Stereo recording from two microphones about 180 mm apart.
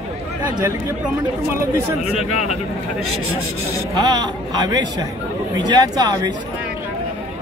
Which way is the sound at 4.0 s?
20° right (ahead or behind).